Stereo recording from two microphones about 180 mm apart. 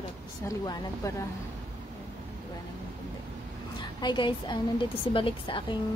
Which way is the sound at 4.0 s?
25° left (ahead or behind).